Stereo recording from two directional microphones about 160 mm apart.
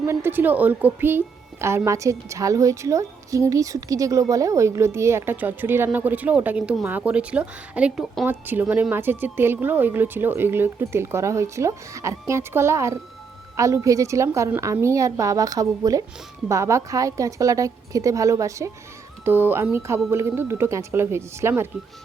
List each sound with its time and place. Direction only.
0.0 s a woman's voice: 15° right (ahead or behind)